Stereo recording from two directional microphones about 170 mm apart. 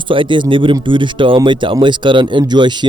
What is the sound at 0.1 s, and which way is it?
A man's voice, 30° right (ahead or behind).